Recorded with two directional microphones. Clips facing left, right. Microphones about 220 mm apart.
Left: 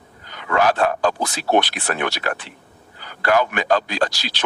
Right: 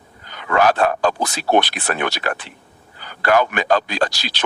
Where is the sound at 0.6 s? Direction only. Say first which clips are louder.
Right 2 dB; 65° right (ahead or behind).